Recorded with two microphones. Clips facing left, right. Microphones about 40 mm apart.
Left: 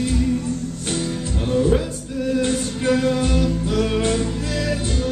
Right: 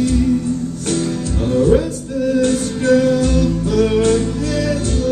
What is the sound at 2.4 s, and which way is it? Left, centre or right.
Music, left.